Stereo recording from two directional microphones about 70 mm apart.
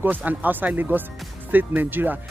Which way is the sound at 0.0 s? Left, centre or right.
Right.